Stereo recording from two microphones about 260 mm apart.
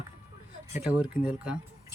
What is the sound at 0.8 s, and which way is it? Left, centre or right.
Speech, centre.